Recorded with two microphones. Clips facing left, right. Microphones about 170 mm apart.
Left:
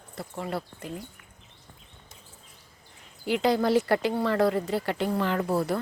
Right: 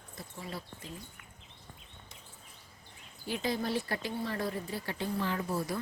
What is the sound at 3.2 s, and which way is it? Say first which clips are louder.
Speech: left 10 dB; 80° left.